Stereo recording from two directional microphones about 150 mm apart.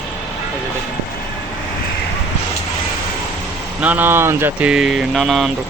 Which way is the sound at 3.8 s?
10° right (ahead or behind).